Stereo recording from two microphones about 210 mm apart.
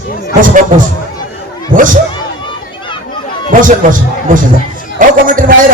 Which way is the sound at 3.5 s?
40° right (ahead or behind).